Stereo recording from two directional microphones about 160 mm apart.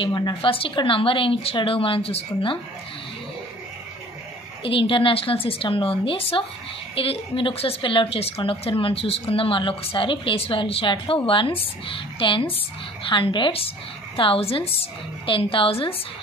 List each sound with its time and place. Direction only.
0.0 s a woman's voice: 25° left (ahead or behind)
4.6 s a woman's voice: 35° left (ahead or behind)